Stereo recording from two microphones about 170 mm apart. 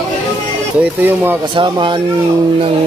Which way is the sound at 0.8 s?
10° right (ahead or behind).